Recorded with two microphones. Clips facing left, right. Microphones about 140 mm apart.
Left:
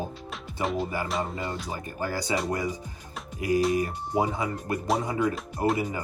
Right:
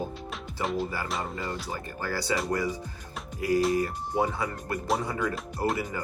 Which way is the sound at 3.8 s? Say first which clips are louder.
Left 1 dB; 20° left (ahead or behind).